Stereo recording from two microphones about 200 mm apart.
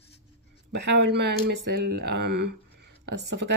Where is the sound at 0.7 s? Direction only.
60° right (ahead or behind).